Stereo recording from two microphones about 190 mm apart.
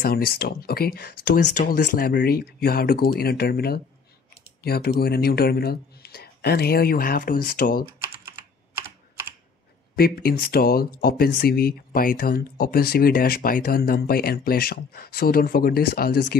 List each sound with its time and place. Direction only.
0.0 s speech: 50° left (ahead or behind)
8.0 s computer keyboard: 15° right (ahead or behind)
9.9 s speech: 50° left (ahead or behind)